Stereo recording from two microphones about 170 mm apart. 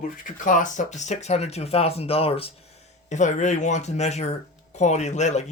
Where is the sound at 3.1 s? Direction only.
45° left (ahead or behind).